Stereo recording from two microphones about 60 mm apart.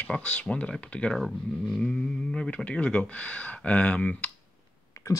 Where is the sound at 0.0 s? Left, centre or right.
Centre.